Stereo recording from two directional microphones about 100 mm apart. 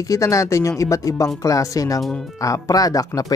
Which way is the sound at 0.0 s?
35° left (ahead or behind).